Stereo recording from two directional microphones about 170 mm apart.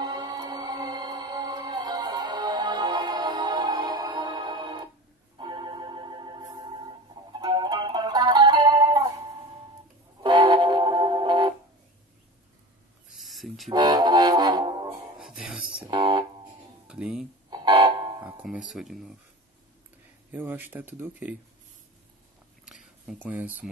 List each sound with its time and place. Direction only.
0.0 s music: 25° right (ahead or behind)
10.2 s music: 30° right (ahead or behind)
13.1 s a sound: centre (ahead or behind)
13.7 s music: 25° right (ahead or behind)
15.1 s music: 5° right (ahead or behind)
15.9 s music: 30° right (ahead or behind)
16.8 s music: 5° right (ahead or behind)
17.5 s music: 30° right (ahead or behind)
18.2 s music: 5° right (ahead or behind)
18.7 s speech: centre (ahead or behind)
20.2 s speech: 10° right (ahead or behind)
23.0 s speech: 10° right (ahead or behind)